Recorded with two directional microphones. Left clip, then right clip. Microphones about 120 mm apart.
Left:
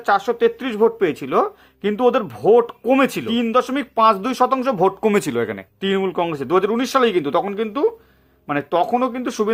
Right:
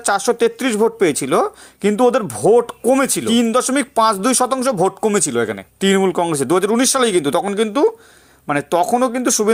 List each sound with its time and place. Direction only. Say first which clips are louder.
0.0 s speech: right 1 dB; 45° right (ahead or behind)
5.0 s speech: right 2 dB; 15° right (ahead or behind)
5.8 s speech: right 5 dB; 45° right (ahead or behind)